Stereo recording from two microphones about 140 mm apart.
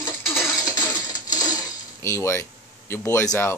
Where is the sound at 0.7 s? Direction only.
30° left (ahead or behind).